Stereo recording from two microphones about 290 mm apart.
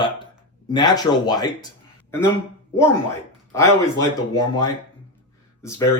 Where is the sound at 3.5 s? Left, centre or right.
Centre.